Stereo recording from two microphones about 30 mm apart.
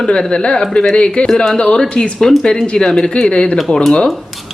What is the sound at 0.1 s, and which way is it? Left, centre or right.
Speech, left.